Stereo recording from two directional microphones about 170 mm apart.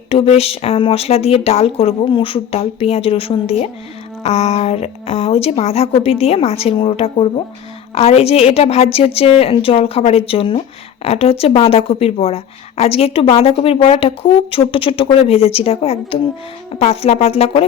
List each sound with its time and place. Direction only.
0.1 s a woman's voice: 35° left (ahead or behind)